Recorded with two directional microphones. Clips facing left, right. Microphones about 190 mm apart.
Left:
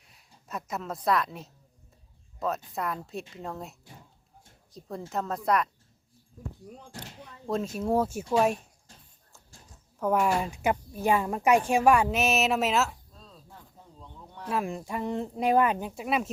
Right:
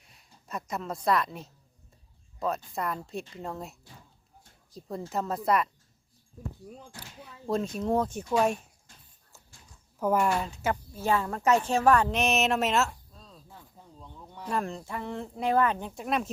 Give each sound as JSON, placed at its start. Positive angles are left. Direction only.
{"t": 0.1, "sound": "a woman's voice", "side_deg": 0}
{"t": 7.4, "sound": "a woman's voice", "side_deg": 0}
{"t": 10.0, "sound": "speech", "side_deg": 0}
{"t": 10.3, "sound": "a woman's voice", "side_deg": 10}
{"t": 14.0, "sound": "speech", "side_deg": 0}